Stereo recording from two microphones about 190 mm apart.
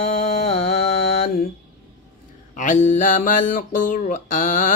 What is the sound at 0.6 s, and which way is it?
Mantra, 55° left (ahead or behind).